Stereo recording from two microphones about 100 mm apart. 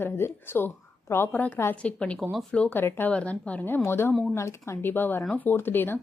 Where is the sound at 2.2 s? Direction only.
Centre (ahead or behind).